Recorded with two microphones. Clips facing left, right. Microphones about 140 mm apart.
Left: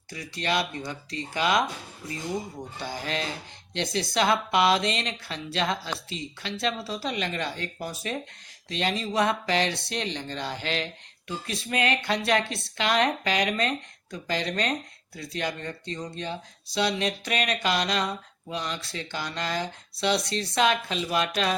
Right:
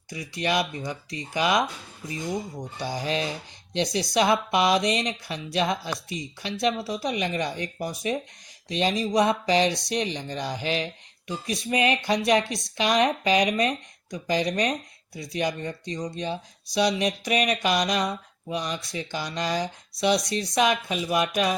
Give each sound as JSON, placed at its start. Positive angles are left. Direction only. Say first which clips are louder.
{"t": 0.1, "sound": "speech", "louder": "right 2 dB", "side_deg": -15}
{"t": 2.7, "sound": "speech", "louder": "right 4 dB", "side_deg": -15}